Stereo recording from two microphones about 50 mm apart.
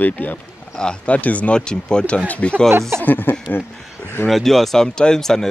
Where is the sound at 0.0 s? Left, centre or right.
Left.